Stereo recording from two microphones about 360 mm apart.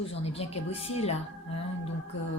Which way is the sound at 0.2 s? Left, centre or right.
Centre.